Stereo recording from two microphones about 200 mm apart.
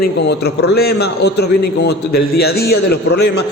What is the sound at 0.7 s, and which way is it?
A man's voice, 55° left (ahead or behind).